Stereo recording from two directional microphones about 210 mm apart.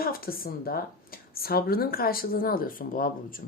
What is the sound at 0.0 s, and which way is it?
Speech, 45° left (ahead or behind).